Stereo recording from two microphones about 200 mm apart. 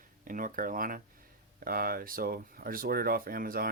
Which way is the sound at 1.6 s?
45° right (ahead or behind).